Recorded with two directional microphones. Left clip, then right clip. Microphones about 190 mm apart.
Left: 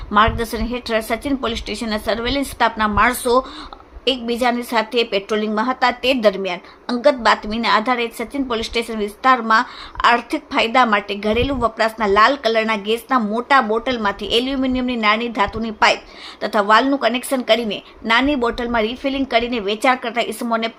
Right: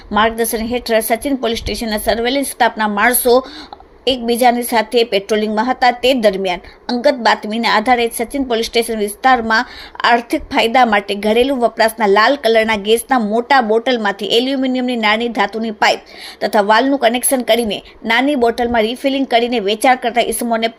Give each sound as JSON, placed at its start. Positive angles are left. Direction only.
{"t": 0.1, "sound": "a woman's voice", "side_deg": -10}